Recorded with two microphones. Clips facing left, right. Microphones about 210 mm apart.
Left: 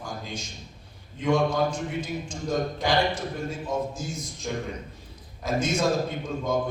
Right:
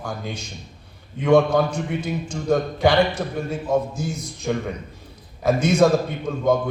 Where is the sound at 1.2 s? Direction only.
65° right (ahead or behind).